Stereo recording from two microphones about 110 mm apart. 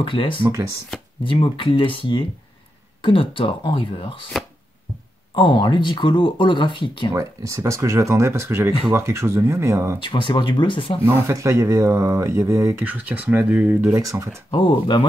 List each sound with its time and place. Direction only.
0.0 s speech: 50° left (ahead or behind)
5.3 s speech: 50° left (ahead or behind)
7.2 s speech: 30° right (ahead or behind)
10.0 s speech: 50° left (ahead or behind)
11.0 s speech: 25° right (ahead or behind)
12.8 s speech: 15° right (ahead or behind)
13.9 s speech: 30° right (ahead or behind)
14.5 s speech: 50° left (ahead or behind)